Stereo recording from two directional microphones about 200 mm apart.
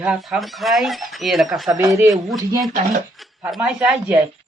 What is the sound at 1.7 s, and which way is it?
Speech, 15° right (ahead or behind).